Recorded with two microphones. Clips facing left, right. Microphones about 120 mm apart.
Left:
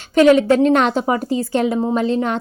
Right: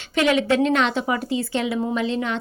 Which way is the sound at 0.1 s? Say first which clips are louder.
Left 8 dB; 40° left (ahead or behind).